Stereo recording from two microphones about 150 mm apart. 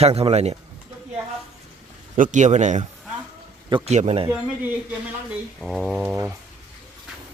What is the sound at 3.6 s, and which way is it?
Speech, 35° right (ahead or behind).